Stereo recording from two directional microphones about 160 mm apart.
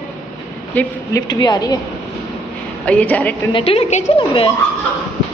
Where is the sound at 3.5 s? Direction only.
40° left (ahead or behind).